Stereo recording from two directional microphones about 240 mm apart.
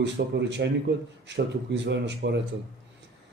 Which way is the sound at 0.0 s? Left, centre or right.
Right.